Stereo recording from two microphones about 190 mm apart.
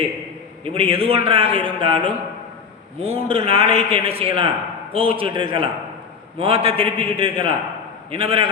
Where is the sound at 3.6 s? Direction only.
40° left (ahead or behind).